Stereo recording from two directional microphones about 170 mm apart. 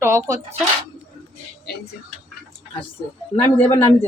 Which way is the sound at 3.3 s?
15° left (ahead or behind).